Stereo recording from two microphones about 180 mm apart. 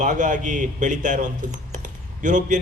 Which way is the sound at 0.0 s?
45° right (ahead or behind).